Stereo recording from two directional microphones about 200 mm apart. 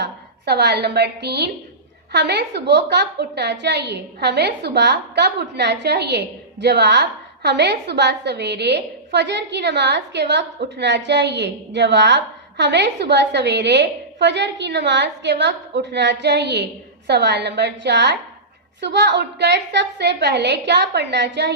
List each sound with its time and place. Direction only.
0.0 s a woman's voice: 55° right (ahead or behind)